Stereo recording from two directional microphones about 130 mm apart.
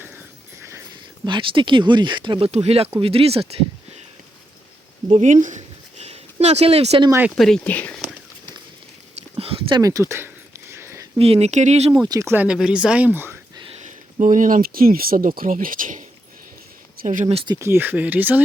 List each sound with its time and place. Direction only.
1.2 s speech: 40° right (ahead or behind)
2.5 s speech: 55° right (ahead or behind)
5.0 s a sound: 65° right (ahead or behind); by 7.0 s 50° right (ahead or behind)
7.3 s speech: centre (ahead or behind)
9.3 s a sound: 45° right (ahead or behind)
9.8 s a sound: 25° right (ahead or behind)
11.2 s speech: 50° right (ahead or behind)
12.0 s speech: 30° right (ahead or behind)
12.3 s speech: 10° right (ahead or behind)
13.7 s speech: 80° right
17.6 s speech: 20° right (ahead or behind)